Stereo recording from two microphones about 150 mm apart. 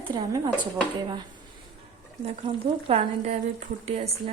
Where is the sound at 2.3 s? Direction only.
40° right (ahead or behind).